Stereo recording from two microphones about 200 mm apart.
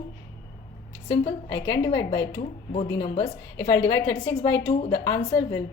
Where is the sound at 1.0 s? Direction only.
30° left (ahead or behind).